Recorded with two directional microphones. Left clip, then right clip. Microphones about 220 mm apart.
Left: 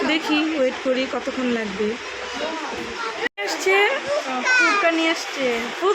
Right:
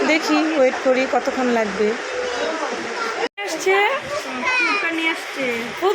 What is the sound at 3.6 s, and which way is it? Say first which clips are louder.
Speech: right 1 dB; 5° left (ahead or behind).